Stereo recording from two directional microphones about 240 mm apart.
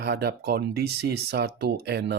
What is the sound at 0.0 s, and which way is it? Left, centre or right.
Speech, right.